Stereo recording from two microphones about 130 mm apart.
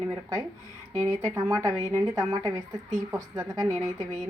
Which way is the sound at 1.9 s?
25° right (ahead or behind).